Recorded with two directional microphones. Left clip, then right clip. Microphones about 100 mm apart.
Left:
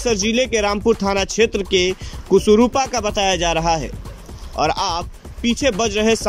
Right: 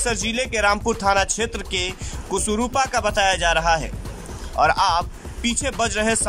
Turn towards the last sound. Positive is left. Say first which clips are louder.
# left 4 dB
turn(degrees=30)  # may be behind; listen again after turning